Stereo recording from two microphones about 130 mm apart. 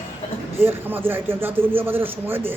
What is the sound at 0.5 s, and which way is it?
A man's voice, 15° right (ahead or behind).